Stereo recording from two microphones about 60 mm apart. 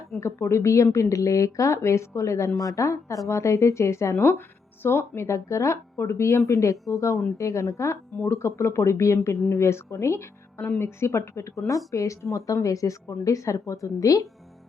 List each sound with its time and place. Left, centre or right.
0.2 s a woman's voice: left
10.6 s a woman's voice: left